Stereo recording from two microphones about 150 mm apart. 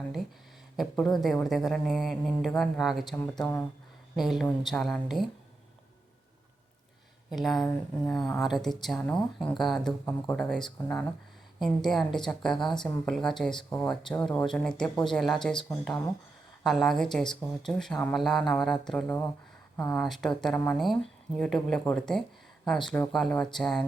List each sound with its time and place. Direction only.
0.8 s speech: centre (ahead or behind)
3.4 s speech: 15° left (ahead or behind)
4.1 s speech: centre (ahead or behind)
7.3 s speech: centre (ahead or behind)
11.6 s speech: centre (ahead or behind)
16.6 s speech: centre (ahead or behind)
19.0 s speech: 15° left (ahead or behind)
19.9 s speech: centre (ahead or behind)